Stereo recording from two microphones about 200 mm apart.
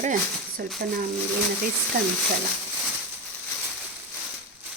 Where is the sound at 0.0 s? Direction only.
40° right (ahead or behind).